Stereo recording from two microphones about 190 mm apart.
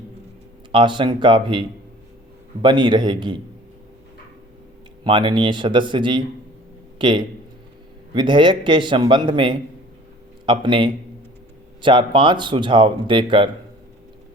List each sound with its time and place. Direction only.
0.7 s speech: 25° right (ahead or behind)
5.0 s speech: 25° right (ahead or behind)